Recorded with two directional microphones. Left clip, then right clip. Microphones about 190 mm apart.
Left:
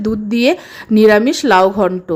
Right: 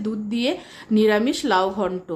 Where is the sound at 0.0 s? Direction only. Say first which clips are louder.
Left 10 dB; 30° left (ahead or behind).